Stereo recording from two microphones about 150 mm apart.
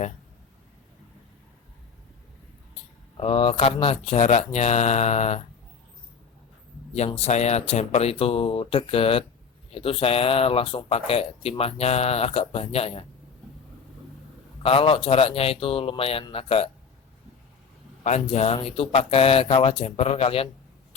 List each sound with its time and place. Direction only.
3.2 s speech: 40° left (ahead or behind)
7.2 s speech: 50° left (ahead or behind)
14.6 s speech: 40° left (ahead or behind)
18.0 s speech: 45° left (ahead or behind)